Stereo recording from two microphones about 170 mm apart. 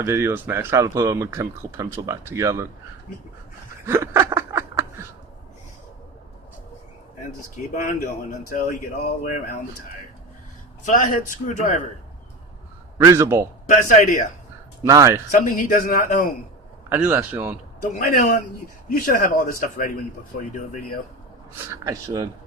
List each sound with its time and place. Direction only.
0.0 s speech: 15° right (ahead or behind)
3.8 s snicker: 15° right (ahead or behind)
7.5 s speech: 50° left (ahead or behind)
10.8 s speech: 50° left (ahead or behind)
13.1 s speech: 15° right (ahead or behind)
13.7 s speech: 45° left (ahead or behind)
14.8 s speech: 20° right (ahead or behind)
15.3 s speech: 50° left (ahead or behind)
16.9 s speech: 10° right (ahead or behind)
17.7 s speech: 50° left (ahead or behind)
21.7 s speech: 20° right (ahead or behind)